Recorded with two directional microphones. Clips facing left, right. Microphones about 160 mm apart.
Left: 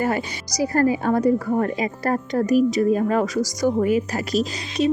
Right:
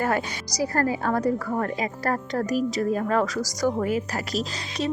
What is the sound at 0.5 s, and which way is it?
A woman's voice, 20° left (ahead or behind).